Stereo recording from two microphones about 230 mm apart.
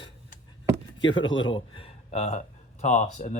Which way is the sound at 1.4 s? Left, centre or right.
Left.